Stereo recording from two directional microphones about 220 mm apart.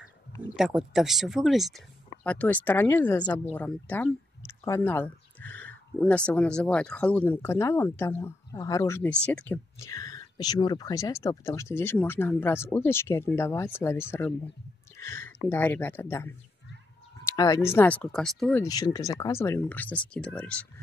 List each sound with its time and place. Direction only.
0.6 s speech: 5° right (ahead or behind); by 3.5 s 20° left (ahead or behind)
3.5 s speech: 5° left (ahead or behind)
15.0 s a sound: 10° left (ahead or behind)
15.4 s speech: 10° left (ahead or behind)
17.3 s speech: 15° left (ahead or behind)
18.6 s speech: 15° left (ahead or behind)